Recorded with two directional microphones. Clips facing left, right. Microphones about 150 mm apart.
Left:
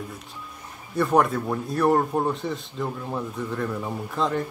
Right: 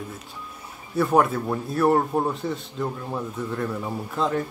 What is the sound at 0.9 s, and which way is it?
Speech, centre (ahead or behind).